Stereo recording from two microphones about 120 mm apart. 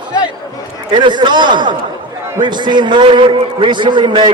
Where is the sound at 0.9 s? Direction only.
40° right (ahead or behind).